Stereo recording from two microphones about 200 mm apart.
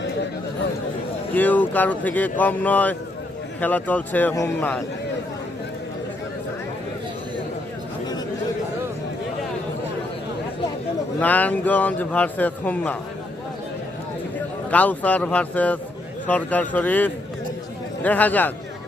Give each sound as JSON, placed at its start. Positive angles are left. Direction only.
{"t": 1.3, "sound": "a man's voice", "side_deg": 10}
{"t": 11.2, "sound": "a man's voice", "side_deg": 10}
{"t": 14.7, "sound": "a man's voice", "side_deg": 5}